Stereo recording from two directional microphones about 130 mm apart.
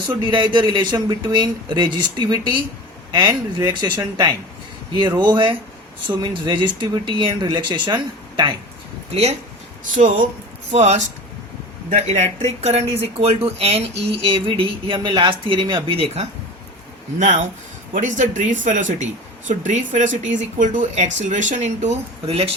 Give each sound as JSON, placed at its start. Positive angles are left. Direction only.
{"t": 0.0, "sound": "speech", "side_deg": -40}
{"t": 10.7, "sound": "speech", "side_deg": -60}
{"t": 17.2, "sound": "speech", "side_deg": -70}